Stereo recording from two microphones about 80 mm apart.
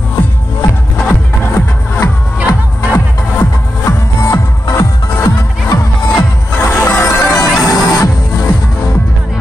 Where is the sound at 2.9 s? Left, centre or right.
Left.